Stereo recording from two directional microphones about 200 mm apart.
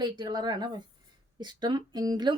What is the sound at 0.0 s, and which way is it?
Speech, 20° right (ahead or behind).